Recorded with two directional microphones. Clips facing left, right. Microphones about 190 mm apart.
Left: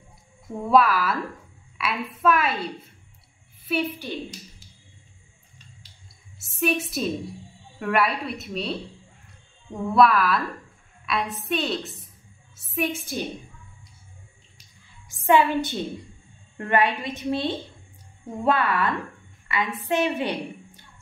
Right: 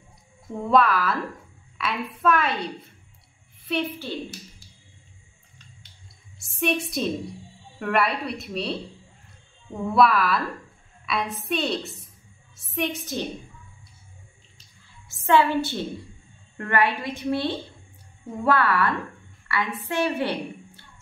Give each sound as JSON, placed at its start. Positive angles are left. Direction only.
{"t": 0.6, "sound": "a woman's voice", "side_deg": 5}
{"t": 3.6, "sound": "a woman's voice", "side_deg": 5}
{"t": 6.4, "sound": "a woman's voice", "side_deg": 5}
{"t": 9.9, "sound": "a woman's voice", "side_deg": 0}
{"t": 15.2, "sound": "a woman's voice", "side_deg": 15}